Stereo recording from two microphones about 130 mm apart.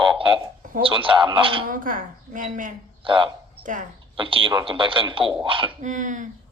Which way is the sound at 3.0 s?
40° right (ahead or behind).